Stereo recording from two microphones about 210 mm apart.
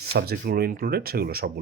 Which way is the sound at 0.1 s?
45° right (ahead or behind).